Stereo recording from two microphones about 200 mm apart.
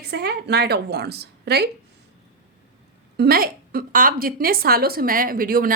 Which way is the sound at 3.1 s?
50° right (ahead or behind).